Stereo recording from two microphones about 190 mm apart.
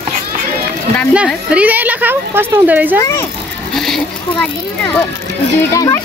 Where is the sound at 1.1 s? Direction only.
5° right (ahead or behind).